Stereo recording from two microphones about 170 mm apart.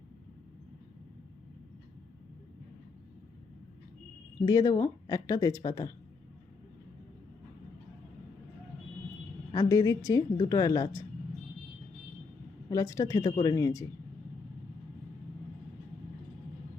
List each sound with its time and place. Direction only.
4.4 s speech: 20° left (ahead or behind)
9.5 s speech: 20° left (ahead or behind)
12.7 s speech: 20° left (ahead or behind)